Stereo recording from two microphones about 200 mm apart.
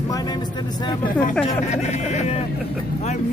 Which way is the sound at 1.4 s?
30° left (ahead or behind).